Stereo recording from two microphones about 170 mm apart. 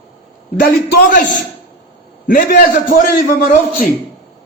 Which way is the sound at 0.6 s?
55° left (ahead or behind).